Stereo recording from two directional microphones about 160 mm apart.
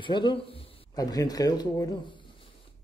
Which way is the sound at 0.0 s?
30° left (ahead or behind).